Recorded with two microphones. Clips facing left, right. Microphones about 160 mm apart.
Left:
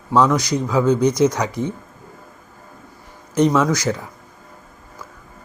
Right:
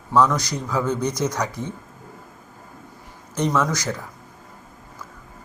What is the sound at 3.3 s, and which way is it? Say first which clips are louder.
Speech: left 6 dB; 15° left (ahead or behind).